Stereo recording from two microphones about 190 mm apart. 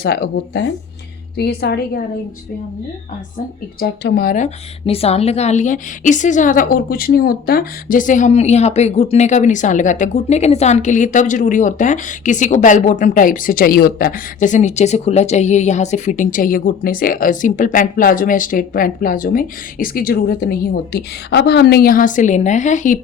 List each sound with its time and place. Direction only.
0.0 s speech: 55° left (ahead or behind)
3.3 s speech: 55° left (ahead or behind)